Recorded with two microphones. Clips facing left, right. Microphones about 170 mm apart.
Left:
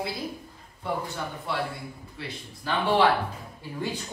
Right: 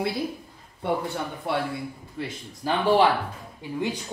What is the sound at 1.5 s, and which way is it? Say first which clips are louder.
Speech: right 5 dB; 60° right (ahead or behind).